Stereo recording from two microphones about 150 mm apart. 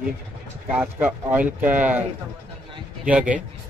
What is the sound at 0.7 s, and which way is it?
Speech, 10° right (ahead or behind).